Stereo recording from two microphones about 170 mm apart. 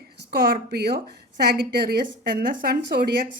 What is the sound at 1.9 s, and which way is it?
A woman's voice, 60° right (ahead or behind).